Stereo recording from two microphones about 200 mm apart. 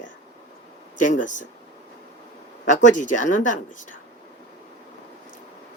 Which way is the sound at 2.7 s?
40° left (ahead or behind).